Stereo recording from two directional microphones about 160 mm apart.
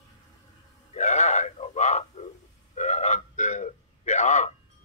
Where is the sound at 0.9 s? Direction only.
45° left (ahead or behind).